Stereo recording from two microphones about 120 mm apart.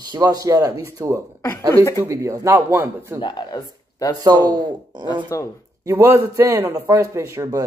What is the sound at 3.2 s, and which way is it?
Speech, 40° left (ahead or behind).